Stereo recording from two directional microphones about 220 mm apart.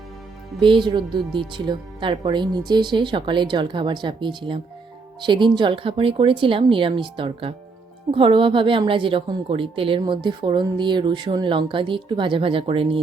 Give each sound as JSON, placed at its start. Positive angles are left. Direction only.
{"t": 0.6, "sound": "a woman's voice", "side_deg": -20}